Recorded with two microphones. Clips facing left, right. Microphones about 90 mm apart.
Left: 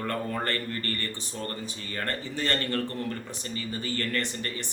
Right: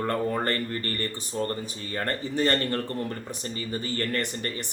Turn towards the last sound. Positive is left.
turn(degrees=-25)  # may be behind; listen again after turning